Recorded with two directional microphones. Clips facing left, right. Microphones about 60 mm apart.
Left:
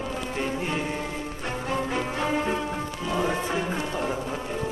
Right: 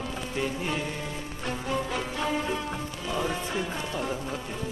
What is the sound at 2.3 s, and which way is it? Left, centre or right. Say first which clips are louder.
Music: left 3 dB; left.